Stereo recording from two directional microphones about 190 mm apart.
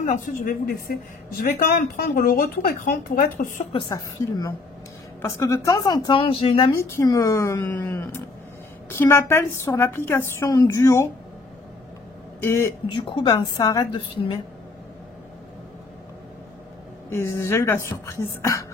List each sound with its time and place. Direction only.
0.0 s a woman's voice: 40° left (ahead or behind)
2.1 s a woman's voice: 45° left (ahead or behind)
3.7 s a woman's voice: 20° left (ahead or behind)
6.8 s a woman's voice: 15° left (ahead or behind)
12.4 s a woman's voice: 15° left (ahead or behind)
12.8 s a woman's voice: 25° left (ahead or behind)
17.1 s a woman's voice: 15° left (ahead or behind)